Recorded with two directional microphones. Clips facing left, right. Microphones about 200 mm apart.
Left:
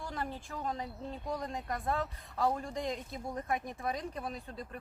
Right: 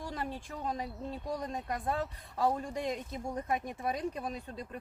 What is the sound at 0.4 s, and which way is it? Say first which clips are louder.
Speech: right 1 dB; 15° right (ahead or behind).